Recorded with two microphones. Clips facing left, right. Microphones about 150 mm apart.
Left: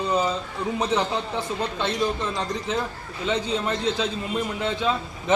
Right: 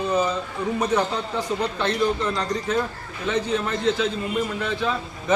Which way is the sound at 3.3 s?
20° left (ahead or behind).